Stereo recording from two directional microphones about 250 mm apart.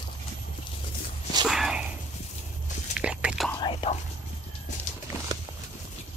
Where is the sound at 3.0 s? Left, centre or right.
Centre.